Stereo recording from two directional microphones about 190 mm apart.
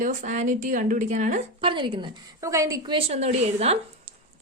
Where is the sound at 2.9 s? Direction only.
35° right (ahead or behind).